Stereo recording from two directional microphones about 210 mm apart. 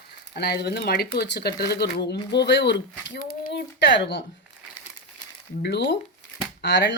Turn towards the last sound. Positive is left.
turn(degrees=55)  # may be behind; listen again after turning